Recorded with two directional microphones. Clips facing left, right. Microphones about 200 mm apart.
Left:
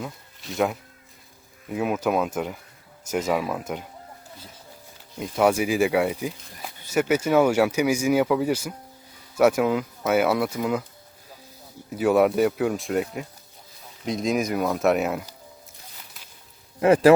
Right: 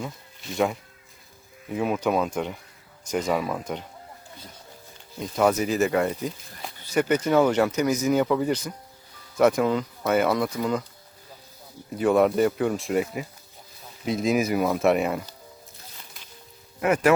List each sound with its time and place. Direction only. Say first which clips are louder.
0.0 s speech: even; centre (ahead or behind)
5.2 s speech: left 1 dB; 10° left (ahead or behind)
11.9 s speech: left 1 dB; 5° left (ahead or behind)
16.8 s a man's voice: left 5 dB; 30° left (ahead or behind)